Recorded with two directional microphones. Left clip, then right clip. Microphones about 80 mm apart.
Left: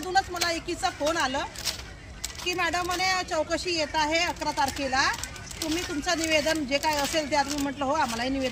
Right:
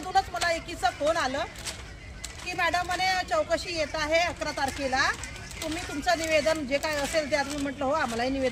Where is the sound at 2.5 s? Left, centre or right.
Right.